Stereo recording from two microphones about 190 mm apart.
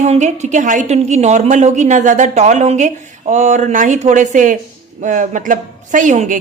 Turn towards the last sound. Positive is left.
turn(degrees=-40)  # may be behind; listen again after turning